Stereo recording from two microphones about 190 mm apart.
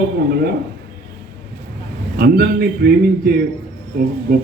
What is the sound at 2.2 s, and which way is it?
A man's voice, 55° right (ahead or behind).